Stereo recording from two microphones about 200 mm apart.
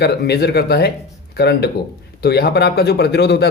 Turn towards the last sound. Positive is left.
turn(degrees=55)  # may be behind; listen again after turning